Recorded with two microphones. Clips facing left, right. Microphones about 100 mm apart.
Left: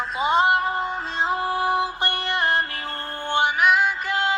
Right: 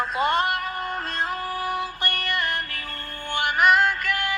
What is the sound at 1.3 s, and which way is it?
Music, 20° left (ahead or behind).